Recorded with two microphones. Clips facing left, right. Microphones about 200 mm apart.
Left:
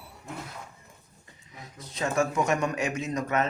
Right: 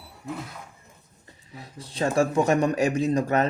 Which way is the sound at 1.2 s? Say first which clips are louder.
Right 4 dB; 35° right (ahead or behind).